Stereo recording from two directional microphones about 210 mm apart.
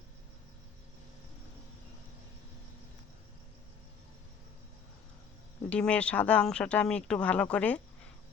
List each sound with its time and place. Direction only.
5.6 s speech: 5° left (ahead or behind)